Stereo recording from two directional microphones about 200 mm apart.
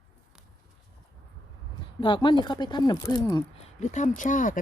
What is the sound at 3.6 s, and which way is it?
Speech, 35° left (ahead or behind).